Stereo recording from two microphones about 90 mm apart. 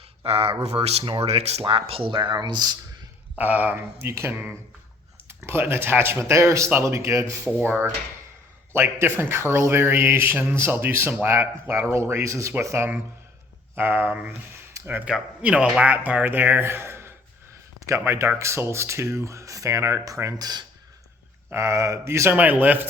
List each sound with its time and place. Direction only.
0.3 s speech: 90° right; by 2.7 s 55° right (ahead or behind)
3.3 s a man's voice: 20° right (ahead or behind); by 7.3 s 35° right (ahead or behind)
8.7 s a man's voice: 25° right (ahead or behind)
21.5 s a man's voice: 30° right (ahead or behind)